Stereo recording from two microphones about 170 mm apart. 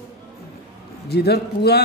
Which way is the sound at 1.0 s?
70° left (ahead or behind).